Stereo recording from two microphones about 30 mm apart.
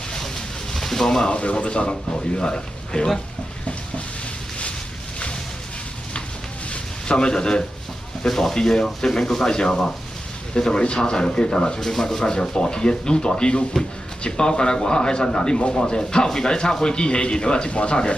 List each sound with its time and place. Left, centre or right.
0.7 s a sound: centre
1.3 s speech: left
1.9 s speech: left
7.1 s speech: left
8.3 s speech: centre
9.5 s speech: left
11.8 s speech: centre; by 18.1 s left